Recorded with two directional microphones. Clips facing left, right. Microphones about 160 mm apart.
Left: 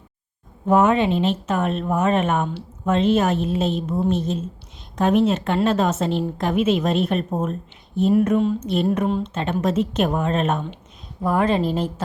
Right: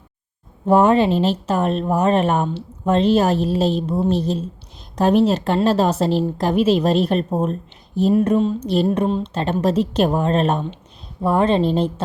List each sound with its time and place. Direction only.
0.7 s a woman's voice: 35° right (ahead or behind)